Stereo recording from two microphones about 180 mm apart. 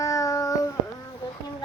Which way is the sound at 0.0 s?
20° left (ahead or behind).